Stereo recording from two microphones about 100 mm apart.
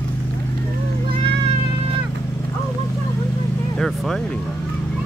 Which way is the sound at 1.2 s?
65° right (ahead or behind).